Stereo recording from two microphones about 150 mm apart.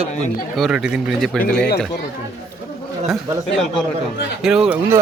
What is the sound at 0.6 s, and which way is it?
Speech, 5° right (ahead or behind).